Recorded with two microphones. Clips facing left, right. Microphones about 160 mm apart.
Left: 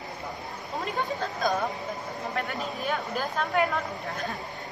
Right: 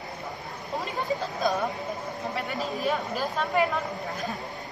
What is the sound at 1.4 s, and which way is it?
Speech, centre (ahead or behind).